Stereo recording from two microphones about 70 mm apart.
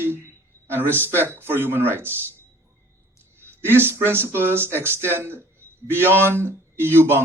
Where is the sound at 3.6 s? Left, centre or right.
Right.